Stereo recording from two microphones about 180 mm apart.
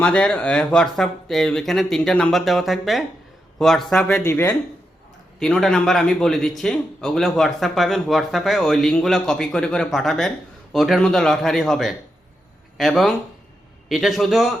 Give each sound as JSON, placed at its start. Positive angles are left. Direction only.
{"t": 0.0, "sound": "speech", "side_deg": 5}
{"t": 5.4, "sound": "speech", "side_deg": 0}